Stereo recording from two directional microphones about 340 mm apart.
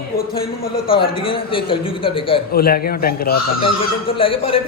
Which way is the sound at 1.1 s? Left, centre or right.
Centre.